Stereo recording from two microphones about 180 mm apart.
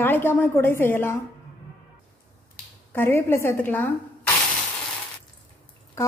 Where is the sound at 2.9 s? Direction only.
15° left (ahead or behind).